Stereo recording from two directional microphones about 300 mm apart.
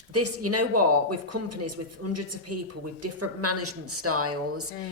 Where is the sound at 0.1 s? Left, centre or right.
Right.